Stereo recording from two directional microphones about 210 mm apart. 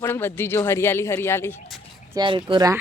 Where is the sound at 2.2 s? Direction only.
20° right (ahead or behind).